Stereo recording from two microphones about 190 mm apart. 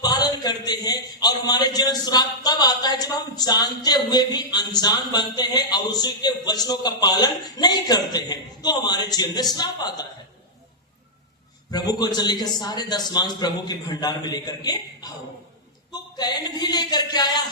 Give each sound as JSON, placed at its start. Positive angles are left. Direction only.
{"t": 0.0, "sound": "a man's voice", "side_deg": 20}
{"t": 11.7, "sound": "a man's voice", "side_deg": 20}